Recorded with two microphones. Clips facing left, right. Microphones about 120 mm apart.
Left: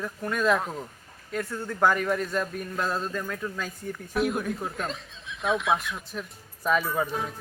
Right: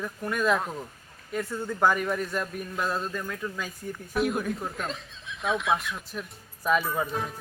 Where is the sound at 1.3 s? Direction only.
15° right (ahead or behind).